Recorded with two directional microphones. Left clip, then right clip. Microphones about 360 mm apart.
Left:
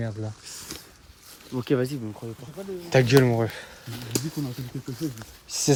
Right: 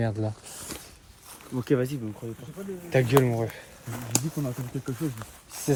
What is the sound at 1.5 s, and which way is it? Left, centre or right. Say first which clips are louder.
Speech: left 1 dB; left.